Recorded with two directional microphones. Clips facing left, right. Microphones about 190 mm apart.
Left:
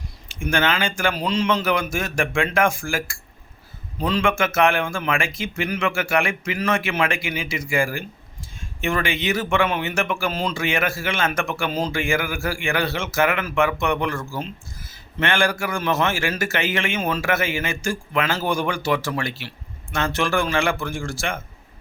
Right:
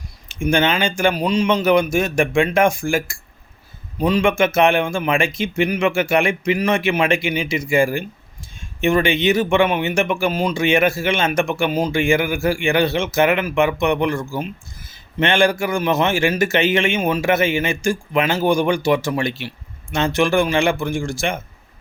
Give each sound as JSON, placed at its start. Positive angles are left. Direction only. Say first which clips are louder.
{"t": 0.3, "sound": "speech", "louder": "right 4 dB", "side_deg": -15}